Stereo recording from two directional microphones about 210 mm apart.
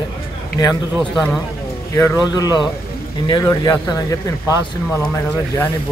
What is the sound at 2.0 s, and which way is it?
Speech, 15° left (ahead or behind).